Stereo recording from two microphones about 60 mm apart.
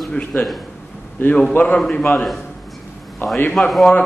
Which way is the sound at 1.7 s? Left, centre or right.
Centre.